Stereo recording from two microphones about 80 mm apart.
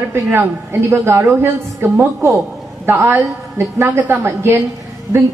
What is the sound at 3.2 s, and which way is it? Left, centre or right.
A woman's voice, right.